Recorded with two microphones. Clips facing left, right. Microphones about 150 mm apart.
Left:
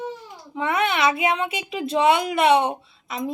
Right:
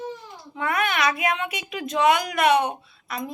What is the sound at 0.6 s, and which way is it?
A woman's voice, 25° left (ahead or behind).